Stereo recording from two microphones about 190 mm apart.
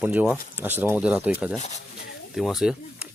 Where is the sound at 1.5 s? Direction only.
35° left (ahead or behind).